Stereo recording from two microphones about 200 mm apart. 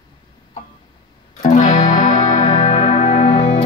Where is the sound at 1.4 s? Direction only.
40° left (ahead or behind).